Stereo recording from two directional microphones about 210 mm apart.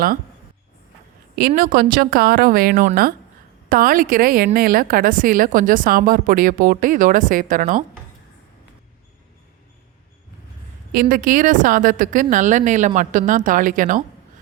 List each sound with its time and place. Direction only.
1.4 s a woman's voice: 45° right (ahead or behind)
10.9 s a woman's voice: 40° right (ahead or behind)